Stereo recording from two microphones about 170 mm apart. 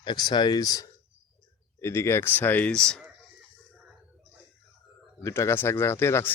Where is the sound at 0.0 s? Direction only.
25° left (ahead or behind); by 3.0 s 5° left (ahead or behind).